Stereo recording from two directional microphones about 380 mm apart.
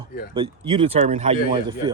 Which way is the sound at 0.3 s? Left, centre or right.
Centre.